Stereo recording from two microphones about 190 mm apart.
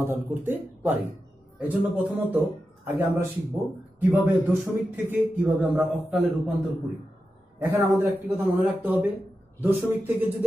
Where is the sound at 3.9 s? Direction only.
10° right (ahead or behind).